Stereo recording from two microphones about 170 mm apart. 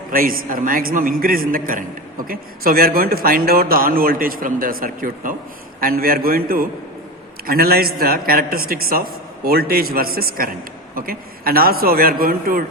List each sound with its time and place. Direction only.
0.1 s a man's voice: 55° right (ahead or behind)